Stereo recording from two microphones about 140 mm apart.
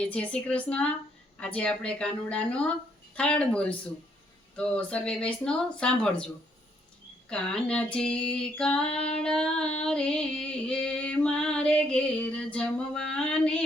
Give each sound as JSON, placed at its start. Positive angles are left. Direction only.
{"t": 0.0, "sound": "female singing", "side_deg": 10}
{"t": 7.3, "sound": "female singing", "side_deg": 5}
{"t": 9.8, "sound": "music", "side_deg": 5}